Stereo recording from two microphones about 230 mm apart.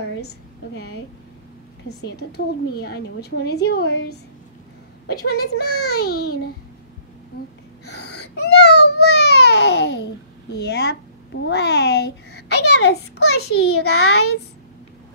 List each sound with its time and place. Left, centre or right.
1.9 s a woman's voice: left
7.8 s a sound: left
10.5 s a woman's voice: left
12.4 s a sound: left
13.2 s a woman's voice: left
13.7 s a child's voice: left